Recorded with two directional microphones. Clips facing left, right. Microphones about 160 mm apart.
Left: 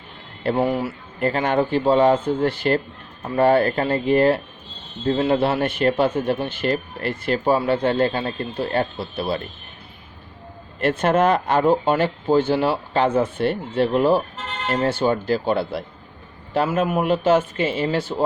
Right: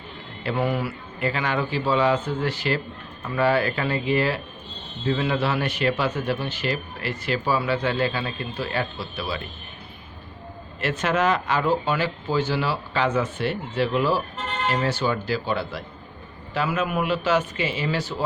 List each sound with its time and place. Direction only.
0.5 s a man's voice: 40° left (ahead or behind); by 9.5 s 55° left (ahead or behind)
10.8 s speech: 55° left (ahead or behind)